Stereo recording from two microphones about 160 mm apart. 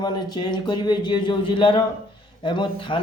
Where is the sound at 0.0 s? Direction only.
25° left (ahead or behind).